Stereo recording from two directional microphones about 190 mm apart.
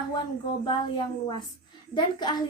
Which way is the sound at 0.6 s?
25° left (ahead or behind).